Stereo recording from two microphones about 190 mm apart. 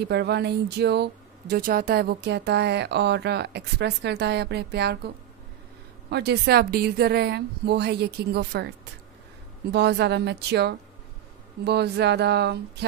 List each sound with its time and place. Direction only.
0.1 s speech: 60° right (ahead or behind)